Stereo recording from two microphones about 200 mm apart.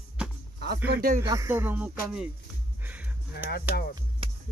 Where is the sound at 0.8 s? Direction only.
55° right (ahead or behind).